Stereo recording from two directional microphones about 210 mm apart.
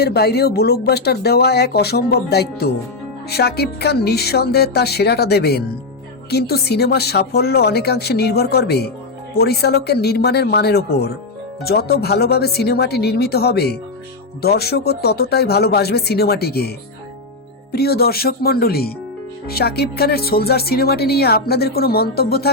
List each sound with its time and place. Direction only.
0.0 s speech: 50° left (ahead or behind)